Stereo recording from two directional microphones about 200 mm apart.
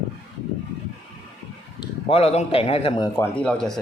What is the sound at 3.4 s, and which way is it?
Speech, 5° left (ahead or behind).